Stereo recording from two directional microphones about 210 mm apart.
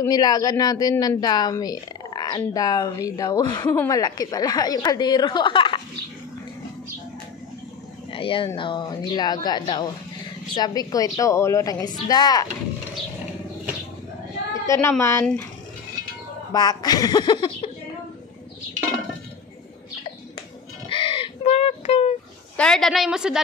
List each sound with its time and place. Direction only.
0.0 s speech: 20° left (ahead or behind)
8.1 s speech: 25° left (ahead or behind)
14.7 s speech: 10° left (ahead or behind)
16.5 s speech: 20° left (ahead or behind)
20.9 s bird: 25° left (ahead or behind)
22.6 s a woman's voice: centre (ahead or behind)